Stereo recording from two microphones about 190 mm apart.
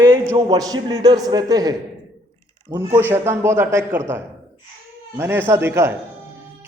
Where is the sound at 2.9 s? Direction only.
10° right (ahead or behind).